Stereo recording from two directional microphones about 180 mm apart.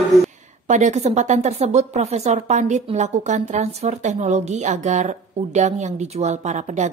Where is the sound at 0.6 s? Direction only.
40° right (ahead or behind).